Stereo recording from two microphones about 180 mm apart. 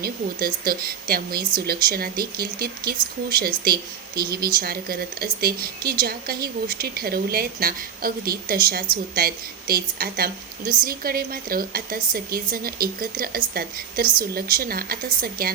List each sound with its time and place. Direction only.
0.0 s speech: 55° right (ahead or behind)